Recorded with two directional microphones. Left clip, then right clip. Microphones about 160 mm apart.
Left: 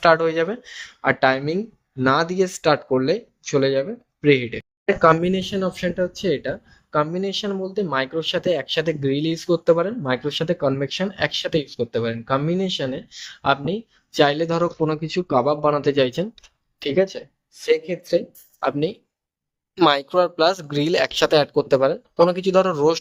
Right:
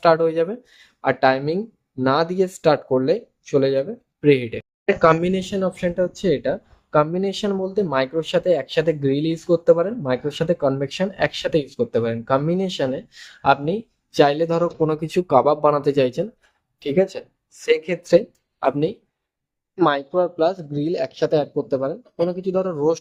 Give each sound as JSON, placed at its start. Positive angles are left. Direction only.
{"t": 0.0, "sound": "speech", "side_deg": 5}
{"t": 15.8, "sound": "speech", "side_deg": -5}
{"t": 17.1, "sound": "speech", "side_deg": -15}
{"t": 18.6, "sound": "speech", "side_deg": 0}
{"t": 19.7, "sound": "speech", "side_deg": 20}